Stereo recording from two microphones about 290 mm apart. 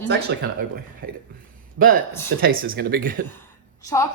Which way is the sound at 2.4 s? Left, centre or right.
Right.